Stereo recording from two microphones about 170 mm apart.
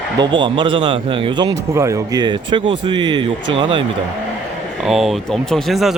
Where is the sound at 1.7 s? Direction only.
15° right (ahead or behind).